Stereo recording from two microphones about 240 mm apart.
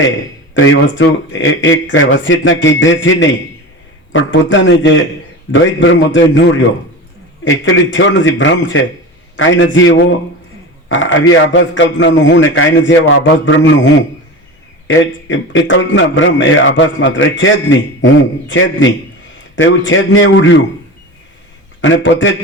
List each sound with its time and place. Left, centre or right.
0.5 s a man's voice: left
14.8 s a man's voice: left
21.8 s a man's voice: left